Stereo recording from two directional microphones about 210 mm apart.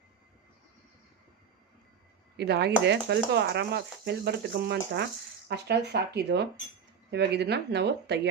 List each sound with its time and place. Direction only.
2.3 s speech: 50° right (ahead or behind)